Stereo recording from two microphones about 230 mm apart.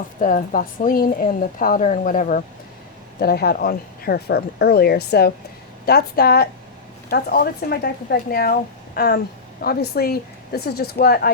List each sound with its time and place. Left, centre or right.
0.2 s a woman's voice: left